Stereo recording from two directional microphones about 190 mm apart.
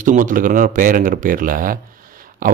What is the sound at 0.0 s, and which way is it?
A man's voice, 45° right (ahead or behind).